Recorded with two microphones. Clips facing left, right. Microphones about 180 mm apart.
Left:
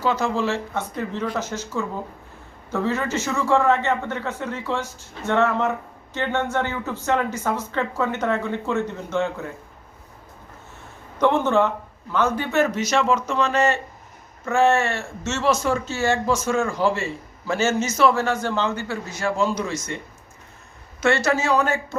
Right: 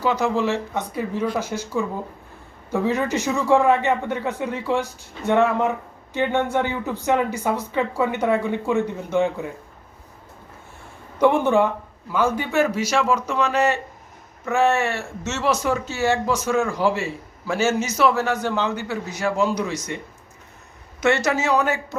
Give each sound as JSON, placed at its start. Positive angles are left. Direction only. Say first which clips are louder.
{"t": 0.0, "sound": "a man's voice", "louder": "right 1 dB", "side_deg": -15}
{"t": 11.2, "sound": "a man's voice", "louder": "right 2 dB", "side_deg": -15}
{"t": 21.2, "sound": "a man's voice", "louder": "even", "side_deg": -15}